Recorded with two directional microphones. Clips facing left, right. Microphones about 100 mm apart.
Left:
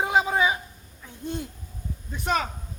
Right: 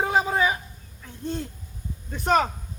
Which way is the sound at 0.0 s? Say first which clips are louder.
Even; 20° left (ahead or behind).